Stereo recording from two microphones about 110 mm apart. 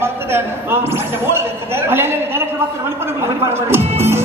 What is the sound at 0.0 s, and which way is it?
A man's voice, 20° right (ahead or behind).